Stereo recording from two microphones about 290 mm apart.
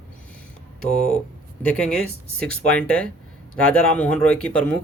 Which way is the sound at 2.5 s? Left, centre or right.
Centre.